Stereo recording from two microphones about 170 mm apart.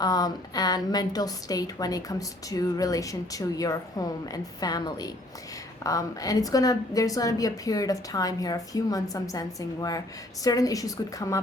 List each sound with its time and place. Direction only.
0.0 s a woman's voice: 25° left (ahead or behind)